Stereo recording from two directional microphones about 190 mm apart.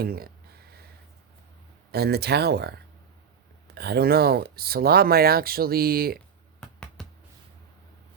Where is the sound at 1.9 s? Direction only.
55° right (ahead or behind).